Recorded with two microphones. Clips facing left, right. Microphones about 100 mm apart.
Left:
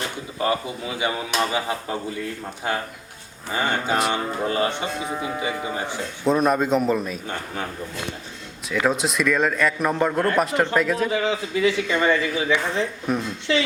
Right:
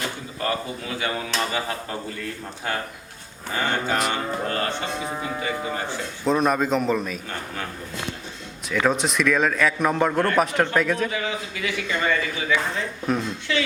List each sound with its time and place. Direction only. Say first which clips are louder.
0.3 s a man's voice: left 4 dB; 20° left (ahead or behind)
6.2 s a man's voice: left 1 dB; centre (ahead or behind)
8.9 s a man's voice: even; centre (ahead or behind)
11.1 s a man's voice: left 6 dB; 30° left (ahead or behind)
13.1 s a man's voice: right 2 dB; 5° left (ahead or behind)
13.5 s a man's voice: left 3 dB; 25° left (ahead or behind)